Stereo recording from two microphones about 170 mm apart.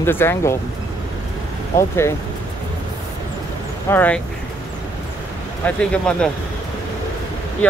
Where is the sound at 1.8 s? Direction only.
15° left (ahead or behind).